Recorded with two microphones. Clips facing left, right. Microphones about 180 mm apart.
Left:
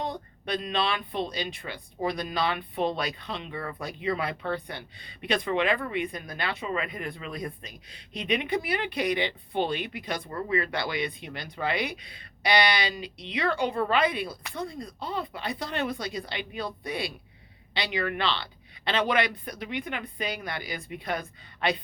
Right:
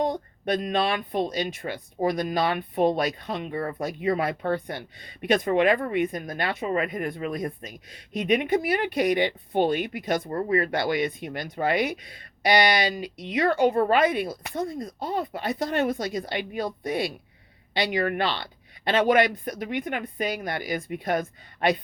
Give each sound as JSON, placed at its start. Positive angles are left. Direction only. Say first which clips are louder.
{"t": 0.0, "sound": "speech", "louder": "right 7 dB", "side_deg": -45}